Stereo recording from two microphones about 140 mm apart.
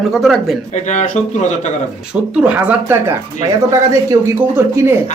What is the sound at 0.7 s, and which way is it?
Speech, 60° left (ahead or behind).